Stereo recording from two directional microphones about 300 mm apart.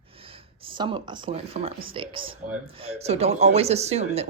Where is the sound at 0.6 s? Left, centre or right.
Centre.